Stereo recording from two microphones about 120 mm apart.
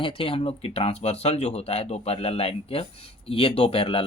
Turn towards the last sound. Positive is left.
turn(degrees=50)  # may be behind; listen again after turning